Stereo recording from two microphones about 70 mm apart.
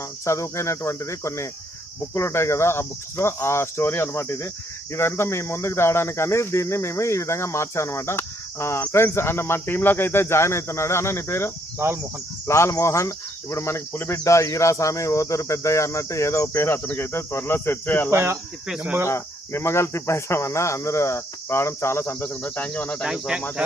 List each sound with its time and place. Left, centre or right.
0.3 s speech: left
11.8 s speech: right
12.5 s speech: left
18.1 s speech: right
18.8 s cricket: right
19.0 s speech: left
23.0 s speech: centre